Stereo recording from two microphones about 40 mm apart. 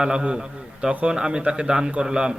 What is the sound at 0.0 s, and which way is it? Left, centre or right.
A man's voice, right.